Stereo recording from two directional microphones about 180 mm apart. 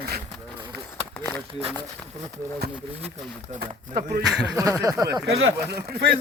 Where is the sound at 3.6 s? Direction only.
55° right (ahead or behind).